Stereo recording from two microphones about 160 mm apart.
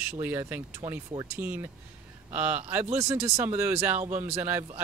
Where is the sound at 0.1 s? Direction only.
10° right (ahead or behind).